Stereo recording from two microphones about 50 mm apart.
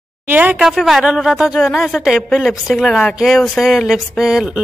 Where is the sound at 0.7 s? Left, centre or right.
Centre.